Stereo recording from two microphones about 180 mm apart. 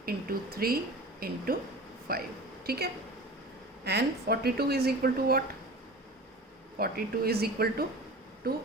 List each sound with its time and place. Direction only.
0.0 s a woman's voice: 55° right (ahead or behind)
6.7 s a woman's voice: 55° right (ahead or behind)